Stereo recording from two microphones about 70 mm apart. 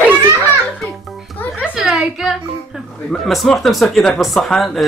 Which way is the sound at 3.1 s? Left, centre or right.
Centre.